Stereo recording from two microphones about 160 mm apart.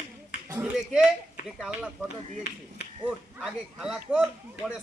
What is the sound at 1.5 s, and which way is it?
Speech, centre (ahead or behind).